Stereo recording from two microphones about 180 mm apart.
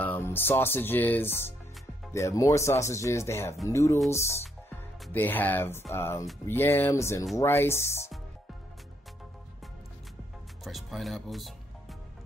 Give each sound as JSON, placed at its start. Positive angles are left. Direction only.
{"t": 0.0, "sound": "speech", "side_deg": 10}
{"t": 10.6, "sound": "music", "side_deg": 0}